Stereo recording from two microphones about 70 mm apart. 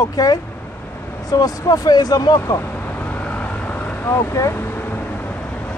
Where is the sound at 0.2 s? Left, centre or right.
Left.